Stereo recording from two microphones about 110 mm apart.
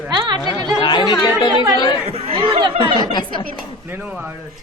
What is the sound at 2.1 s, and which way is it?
Speech, 65° right (ahead or behind).